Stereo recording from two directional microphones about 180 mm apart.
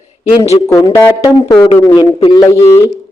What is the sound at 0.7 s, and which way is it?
Speech, 15° left (ahead or behind).